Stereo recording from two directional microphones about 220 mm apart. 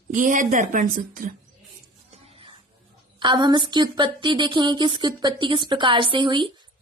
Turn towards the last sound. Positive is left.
turn(degrees=-20)  # may be behind; listen again after turning